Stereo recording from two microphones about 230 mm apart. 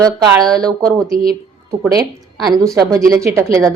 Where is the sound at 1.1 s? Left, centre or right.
Right.